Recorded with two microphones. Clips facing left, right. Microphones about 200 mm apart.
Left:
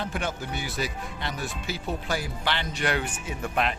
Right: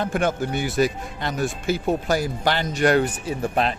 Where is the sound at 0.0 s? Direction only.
50° right (ahead or behind).